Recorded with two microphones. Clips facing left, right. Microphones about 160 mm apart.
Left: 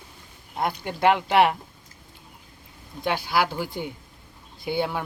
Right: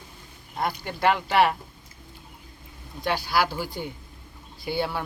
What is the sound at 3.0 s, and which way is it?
Speech, 20° left (ahead or behind).